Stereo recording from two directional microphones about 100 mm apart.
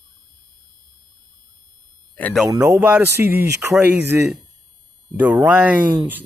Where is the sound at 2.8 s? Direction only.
20° right (ahead or behind).